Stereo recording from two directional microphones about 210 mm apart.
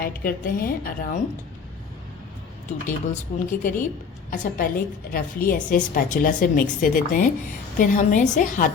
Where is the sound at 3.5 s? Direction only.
40° left (ahead or behind).